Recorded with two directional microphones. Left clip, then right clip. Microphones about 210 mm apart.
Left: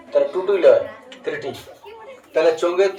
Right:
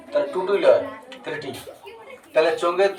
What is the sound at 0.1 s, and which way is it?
Speech, 20° right (ahead or behind).